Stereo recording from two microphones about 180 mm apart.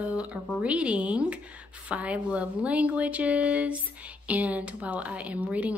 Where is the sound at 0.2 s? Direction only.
5° right (ahead or behind).